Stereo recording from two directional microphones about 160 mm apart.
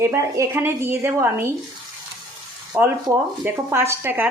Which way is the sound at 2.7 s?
10° right (ahead or behind).